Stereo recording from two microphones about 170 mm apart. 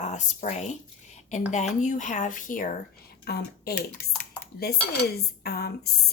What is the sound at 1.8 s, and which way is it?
Speech, 45° left (ahead or behind).